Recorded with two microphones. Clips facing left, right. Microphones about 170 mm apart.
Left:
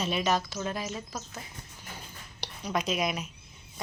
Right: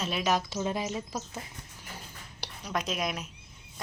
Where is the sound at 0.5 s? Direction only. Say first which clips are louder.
Right 3 dB; 20° right (ahead or behind).